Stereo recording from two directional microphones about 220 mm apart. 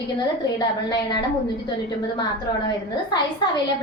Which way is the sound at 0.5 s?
20° left (ahead or behind).